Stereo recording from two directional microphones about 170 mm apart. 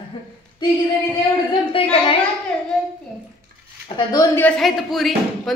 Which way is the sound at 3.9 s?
30° left (ahead or behind).